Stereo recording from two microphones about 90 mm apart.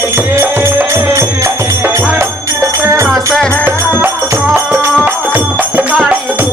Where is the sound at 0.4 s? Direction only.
30° right (ahead or behind).